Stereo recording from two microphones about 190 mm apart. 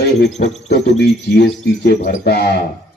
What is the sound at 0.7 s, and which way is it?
Speech, 60° left (ahead or behind).